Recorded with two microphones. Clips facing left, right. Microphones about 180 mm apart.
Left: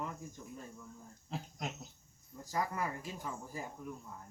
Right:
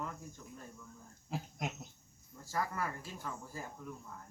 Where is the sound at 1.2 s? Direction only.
10° right (ahead or behind).